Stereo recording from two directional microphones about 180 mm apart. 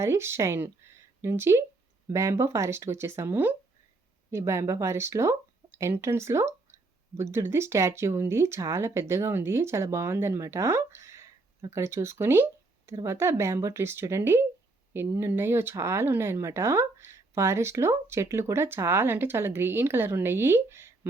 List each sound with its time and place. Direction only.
0.0 s speech: 15° right (ahead or behind)